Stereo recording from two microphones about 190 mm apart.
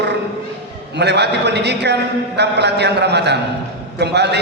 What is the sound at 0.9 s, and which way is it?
A man's voice, 65° right (ahead or behind).